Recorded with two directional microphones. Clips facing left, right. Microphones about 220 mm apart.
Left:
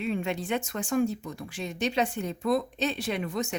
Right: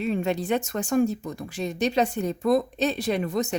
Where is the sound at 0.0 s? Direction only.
40° right (ahead or behind).